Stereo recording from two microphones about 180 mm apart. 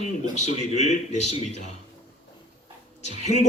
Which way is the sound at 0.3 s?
40° left (ahead or behind).